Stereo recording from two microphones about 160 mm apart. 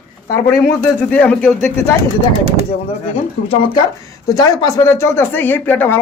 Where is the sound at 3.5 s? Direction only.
35° left (ahead or behind).